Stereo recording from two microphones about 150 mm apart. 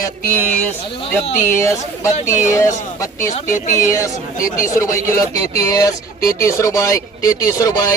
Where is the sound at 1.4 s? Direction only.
20° left (ahead or behind).